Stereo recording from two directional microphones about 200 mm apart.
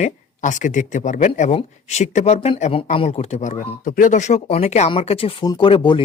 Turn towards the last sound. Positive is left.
turn(degrees=25)  # may be behind; listen again after turning